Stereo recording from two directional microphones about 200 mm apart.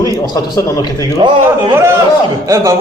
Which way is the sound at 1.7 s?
10° right (ahead or behind).